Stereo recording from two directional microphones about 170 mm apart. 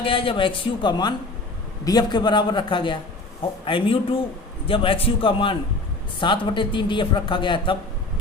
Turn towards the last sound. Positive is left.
turn(degrees=30)  # may be behind; listen again after turning